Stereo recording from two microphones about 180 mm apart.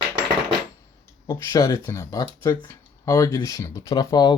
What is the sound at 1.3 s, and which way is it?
Speech, 15° left (ahead or behind).